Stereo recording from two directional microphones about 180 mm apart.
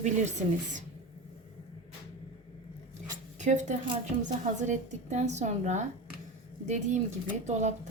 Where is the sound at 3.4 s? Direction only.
45° right (ahead or behind).